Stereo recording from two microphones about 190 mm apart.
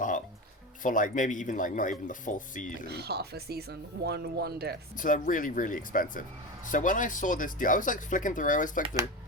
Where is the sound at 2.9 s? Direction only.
60° right (ahead or behind).